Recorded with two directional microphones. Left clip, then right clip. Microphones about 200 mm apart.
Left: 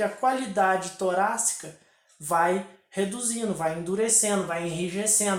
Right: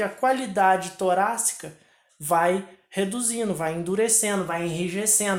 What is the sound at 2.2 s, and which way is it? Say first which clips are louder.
Speech: right 2 dB; 50° right (ahead or behind).